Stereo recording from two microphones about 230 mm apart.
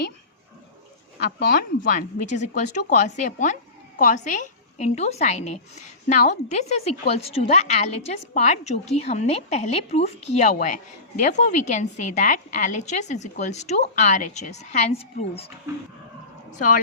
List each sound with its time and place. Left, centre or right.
1.5 s a woman's voice: left
16.5 s a woman's voice: left